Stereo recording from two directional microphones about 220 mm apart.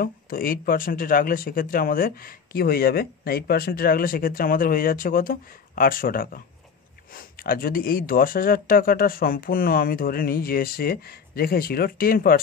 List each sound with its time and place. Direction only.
0.0 s speech: 40° left (ahead or behind)